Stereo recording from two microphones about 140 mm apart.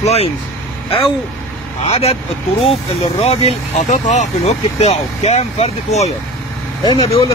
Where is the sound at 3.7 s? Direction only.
60° left (ahead or behind).